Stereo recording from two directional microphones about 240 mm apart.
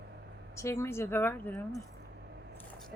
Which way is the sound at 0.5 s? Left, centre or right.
Centre.